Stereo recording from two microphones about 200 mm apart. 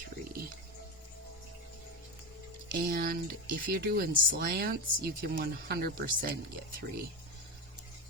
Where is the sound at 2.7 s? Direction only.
45° right (ahead or behind).